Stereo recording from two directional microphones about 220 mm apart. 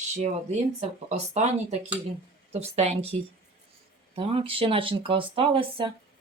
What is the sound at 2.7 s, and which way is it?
Speech, 30° right (ahead or behind).